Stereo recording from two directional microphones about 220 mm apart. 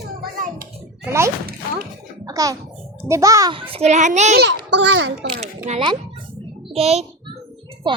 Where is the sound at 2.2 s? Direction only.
15° right (ahead or behind).